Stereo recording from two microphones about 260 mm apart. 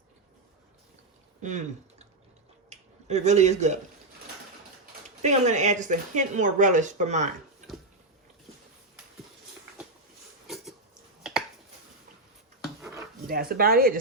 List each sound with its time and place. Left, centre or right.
1.4 s a sound: right
2.6 s finger snapping: right
5.2 s speech: right
10.4 s a sound: centre
11.2 s finger snapping: centre
13.2 s speech: right